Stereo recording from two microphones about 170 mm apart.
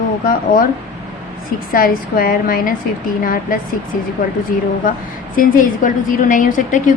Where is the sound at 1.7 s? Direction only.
55° left (ahead or behind).